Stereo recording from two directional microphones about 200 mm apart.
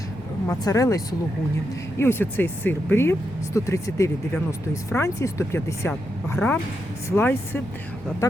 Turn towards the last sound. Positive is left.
turn(degrees=10)  # may be behind; listen again after turning